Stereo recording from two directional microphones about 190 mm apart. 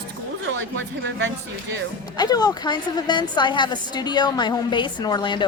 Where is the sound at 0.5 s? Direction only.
80° right.